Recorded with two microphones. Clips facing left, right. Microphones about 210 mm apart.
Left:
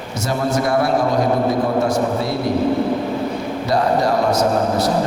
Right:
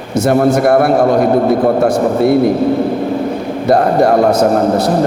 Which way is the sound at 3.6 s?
55° right (ahead or behind).